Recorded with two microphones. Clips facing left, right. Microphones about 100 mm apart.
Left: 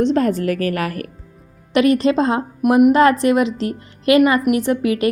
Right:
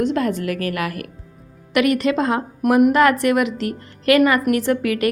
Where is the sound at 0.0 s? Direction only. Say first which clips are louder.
Left 4 dB; 35° left (ahead or behind).